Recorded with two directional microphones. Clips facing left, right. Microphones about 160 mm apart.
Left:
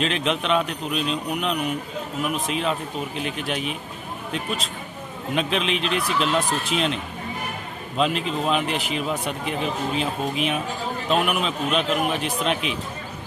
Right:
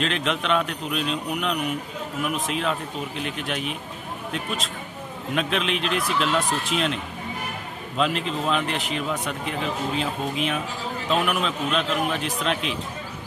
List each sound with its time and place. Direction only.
0.0 s a man's voice: centre (ahead or behind)